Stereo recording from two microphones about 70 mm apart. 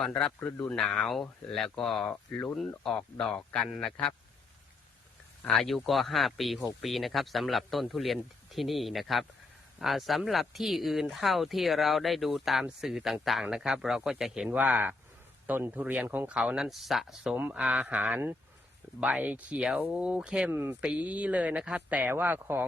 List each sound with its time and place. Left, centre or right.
0.7 s speech: centre
5.5 s speech: centre; by 16.4 s right
16.6 s speech: centre
20.5 s speech: right
20.8 s speech: centre